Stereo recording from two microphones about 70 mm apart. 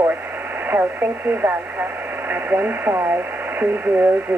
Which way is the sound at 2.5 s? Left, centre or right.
Right.